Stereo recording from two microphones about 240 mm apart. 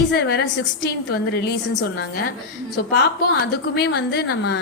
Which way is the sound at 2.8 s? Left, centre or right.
Left.